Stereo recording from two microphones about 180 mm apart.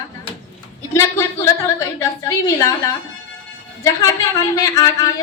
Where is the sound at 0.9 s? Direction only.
15° left (ahead or behind).